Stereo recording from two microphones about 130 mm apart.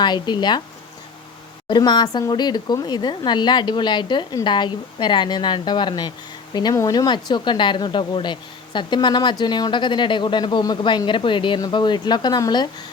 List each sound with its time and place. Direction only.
0.0 s speech: 35° left (ahead or behind)
1.6 s speech: 35° left (ahead or behind)